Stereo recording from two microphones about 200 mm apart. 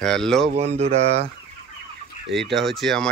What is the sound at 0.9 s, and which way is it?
Fowl, 30° right (ahead or behind).